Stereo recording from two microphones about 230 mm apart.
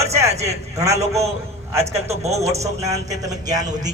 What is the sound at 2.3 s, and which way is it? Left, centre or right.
Speech, centre.